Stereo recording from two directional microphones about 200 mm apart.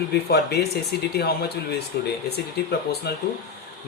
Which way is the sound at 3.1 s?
55° left (ahead or behind).